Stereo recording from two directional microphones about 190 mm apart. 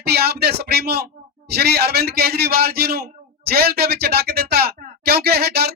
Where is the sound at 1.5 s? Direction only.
55° right (ahead or behind).